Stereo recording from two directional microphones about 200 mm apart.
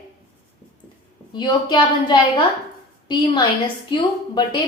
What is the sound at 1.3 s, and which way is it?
A woman's voice, 20° left (ahead or behind).